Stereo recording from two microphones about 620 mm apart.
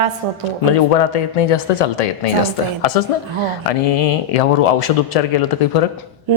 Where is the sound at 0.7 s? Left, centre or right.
Left.